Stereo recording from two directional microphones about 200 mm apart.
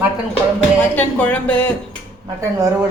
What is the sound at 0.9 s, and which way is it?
Speech, 5° left (ahead or behind).